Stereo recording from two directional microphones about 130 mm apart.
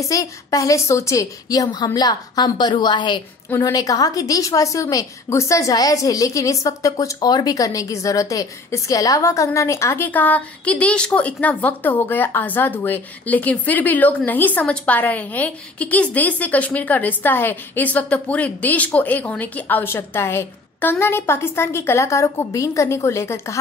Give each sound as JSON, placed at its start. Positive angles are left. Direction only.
{"t": 0.1, "sound": "a woman's voice", "side_deg": 25}